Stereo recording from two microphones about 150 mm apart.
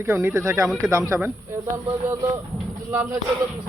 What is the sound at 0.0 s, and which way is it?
Speech, 15° right (ahead or behind).